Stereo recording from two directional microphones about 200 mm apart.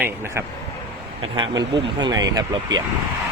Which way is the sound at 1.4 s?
20° right (ahead or behind).